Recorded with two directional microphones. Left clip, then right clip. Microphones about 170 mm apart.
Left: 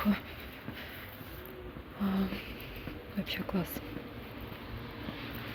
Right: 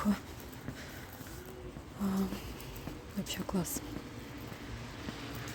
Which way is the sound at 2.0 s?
30° right (ahead or behind).